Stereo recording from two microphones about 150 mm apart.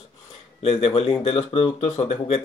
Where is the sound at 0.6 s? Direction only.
40° left (ahead or behind).